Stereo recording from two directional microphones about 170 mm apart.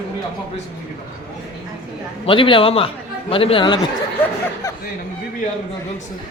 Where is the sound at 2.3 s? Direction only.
30° left (ahead or behind).